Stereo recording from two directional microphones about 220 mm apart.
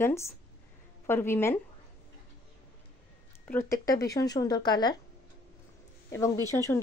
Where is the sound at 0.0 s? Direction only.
10° left (ahead or behind).